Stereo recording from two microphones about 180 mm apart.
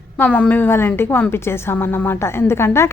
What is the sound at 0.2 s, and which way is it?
A woman's voice, 5° left (ahead or behind).